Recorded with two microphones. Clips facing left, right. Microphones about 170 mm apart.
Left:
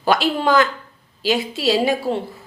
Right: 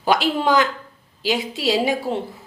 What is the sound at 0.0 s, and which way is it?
A woman's voice, 15° right (ahead or behind).